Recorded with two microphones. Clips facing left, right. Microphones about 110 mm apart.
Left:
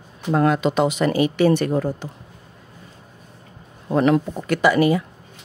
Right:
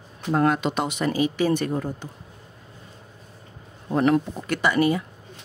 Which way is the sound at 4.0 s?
90° left.